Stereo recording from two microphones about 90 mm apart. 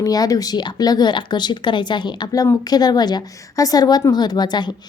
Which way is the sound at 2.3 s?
40° left (ahead or behind).